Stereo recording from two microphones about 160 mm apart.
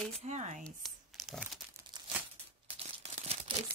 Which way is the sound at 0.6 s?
5° left (ahead or behind).